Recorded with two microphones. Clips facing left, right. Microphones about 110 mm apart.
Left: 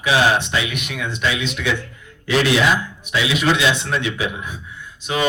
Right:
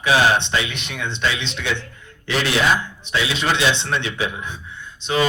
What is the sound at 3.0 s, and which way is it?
A man's voice, 30° right (ahead or behind).